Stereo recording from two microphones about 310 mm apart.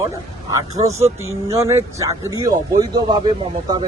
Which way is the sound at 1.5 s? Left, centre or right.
Centre.